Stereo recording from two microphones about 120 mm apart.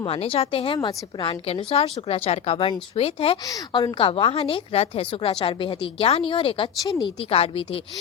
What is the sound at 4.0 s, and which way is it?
A woman's voice, 50° left (ahead or behind).